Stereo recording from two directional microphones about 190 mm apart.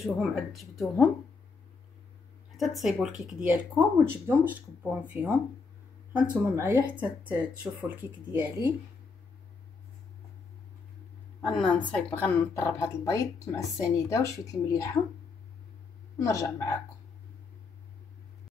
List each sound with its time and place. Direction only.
0.0 s speech: centre (ahead or behind)
2.5 s speech: centre (ahead or behind)
11.5 s speech: 5° left (ahead or behind)
16.2 s speech: 15° left (ahead or behind)